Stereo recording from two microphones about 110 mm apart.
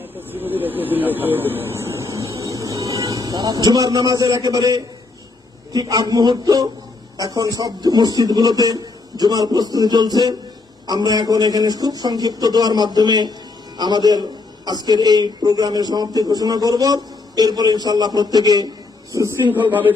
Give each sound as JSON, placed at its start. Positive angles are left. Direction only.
{"t": 0.2, "sound": "a man's voice", "side_deg": -15}